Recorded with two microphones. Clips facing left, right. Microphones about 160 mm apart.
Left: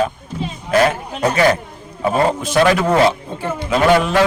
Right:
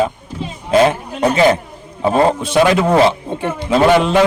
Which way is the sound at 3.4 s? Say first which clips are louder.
Right 3 dB; 25° right (ahead or behind).